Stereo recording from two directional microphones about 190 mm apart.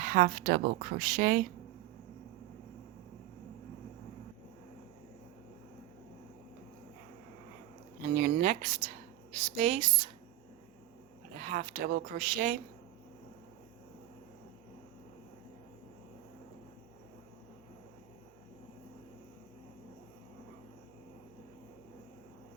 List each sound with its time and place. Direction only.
0.0 s speech: 40° right (ahead or behind)
8.1 s speech: 40° right (ahead or behind)
11.3 s speech: 45° right (ahead or behind)